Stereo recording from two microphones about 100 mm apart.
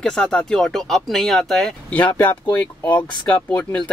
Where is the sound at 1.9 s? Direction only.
15° left (ahead or behind).